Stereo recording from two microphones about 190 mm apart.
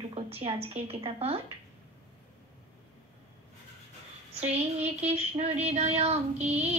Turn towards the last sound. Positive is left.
turn(degrees=-35)  # may be behind; listen again after turning